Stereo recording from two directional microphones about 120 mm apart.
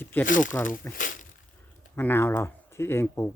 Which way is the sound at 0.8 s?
20° left (ahead or behind).